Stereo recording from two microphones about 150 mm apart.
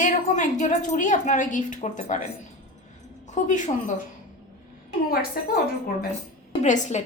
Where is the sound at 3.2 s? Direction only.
55° left (ahead or behind).